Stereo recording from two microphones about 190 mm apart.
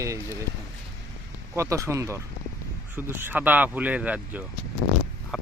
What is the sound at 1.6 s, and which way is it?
Speech, 15° right (ahead or behind).